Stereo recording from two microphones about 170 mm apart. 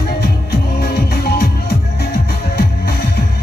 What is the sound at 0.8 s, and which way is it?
Music, 70° left (ahead or behind).